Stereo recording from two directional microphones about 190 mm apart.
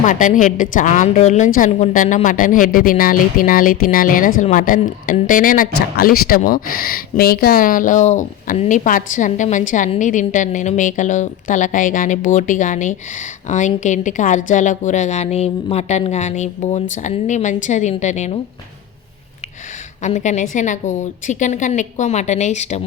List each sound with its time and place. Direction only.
0.0 s a woman's voice: 45° left (ahead or behind)
20.0 s a woman's voice: 40° left (ahead or behind)